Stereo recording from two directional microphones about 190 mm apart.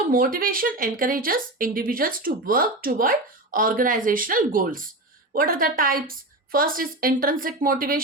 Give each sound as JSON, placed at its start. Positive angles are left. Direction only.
{"t": 0.1, "sound": "a woman's voice", "side_deg": -50}